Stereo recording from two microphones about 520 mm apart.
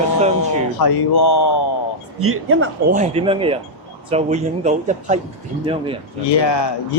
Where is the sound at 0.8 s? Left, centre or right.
Left.